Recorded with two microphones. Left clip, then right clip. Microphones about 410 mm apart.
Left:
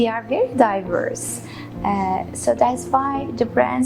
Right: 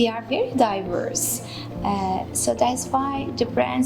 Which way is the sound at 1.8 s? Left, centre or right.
Left.